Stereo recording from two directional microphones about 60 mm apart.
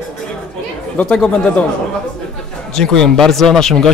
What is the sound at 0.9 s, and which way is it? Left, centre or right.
Speech, centre.